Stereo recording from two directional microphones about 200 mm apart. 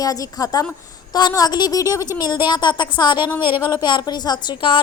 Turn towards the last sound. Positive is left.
turn(degrees=25)  # may be behind; listen again after turning